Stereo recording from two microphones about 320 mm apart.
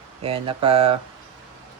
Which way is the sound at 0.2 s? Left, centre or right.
Centre.